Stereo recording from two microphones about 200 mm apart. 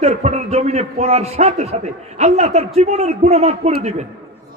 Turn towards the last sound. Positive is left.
turn(degrees=-30)  # may be behind; listen again after turning